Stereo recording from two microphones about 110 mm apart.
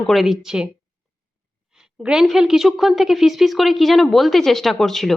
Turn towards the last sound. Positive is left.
turn(degrees=5)  # may be behind; listen again after turning